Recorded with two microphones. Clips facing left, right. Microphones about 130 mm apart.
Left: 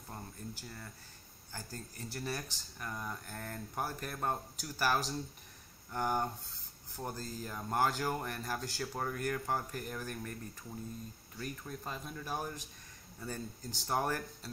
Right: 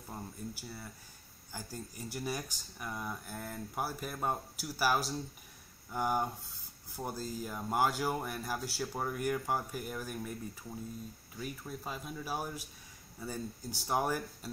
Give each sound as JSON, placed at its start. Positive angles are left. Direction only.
{"t": 0.1, "sound": "speech", "side_deg": -10}